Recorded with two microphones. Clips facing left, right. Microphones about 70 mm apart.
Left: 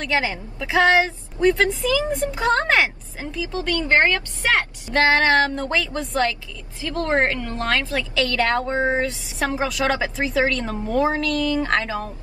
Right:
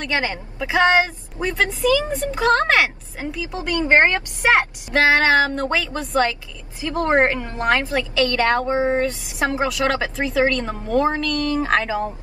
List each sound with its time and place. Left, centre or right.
0.0 s speech: centre
3.3 s a woman's voice: centre
5.1 s speech: centre
6.8 s a woman's voice: centre
8.1 s speech: centre
11.4 s speech: centre